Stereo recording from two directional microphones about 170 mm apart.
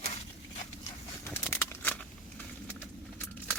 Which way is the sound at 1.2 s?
15° left (ahead or behind).